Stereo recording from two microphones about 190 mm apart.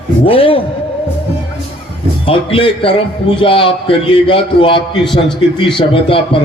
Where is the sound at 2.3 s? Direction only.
30° left (ahead or behind).